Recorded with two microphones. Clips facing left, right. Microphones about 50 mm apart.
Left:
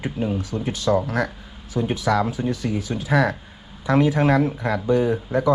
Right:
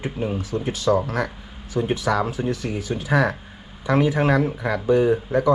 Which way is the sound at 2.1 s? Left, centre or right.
Right.